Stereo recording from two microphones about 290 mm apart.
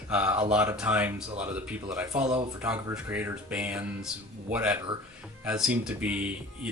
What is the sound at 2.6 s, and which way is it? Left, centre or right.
Speech, centre.